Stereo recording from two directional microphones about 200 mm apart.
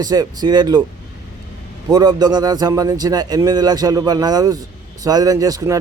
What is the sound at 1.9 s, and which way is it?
A man's voice, 20° right (ahead or behind).